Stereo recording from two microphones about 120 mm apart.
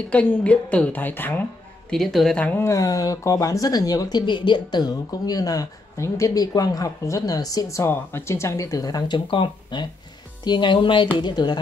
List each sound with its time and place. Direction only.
0.1 s a woman's voice: 10° left (ahead or behind)
1.9 s speech: centre (ahead or behind); by 11.5 s 40° left (ahead or behind)